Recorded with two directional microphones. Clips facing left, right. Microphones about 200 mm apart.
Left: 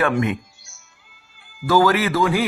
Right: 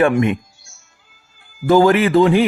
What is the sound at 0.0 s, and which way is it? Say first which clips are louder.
Speech: right 5 dB; 15° right (ahead or behind).